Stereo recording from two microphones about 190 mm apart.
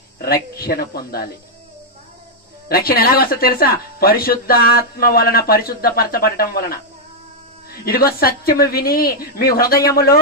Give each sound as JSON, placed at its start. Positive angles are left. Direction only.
{"t": 0.2, "sound": "speech", "side_deg": 55}
{"t": 2.7, "sound": "speech", "side_deg": 50}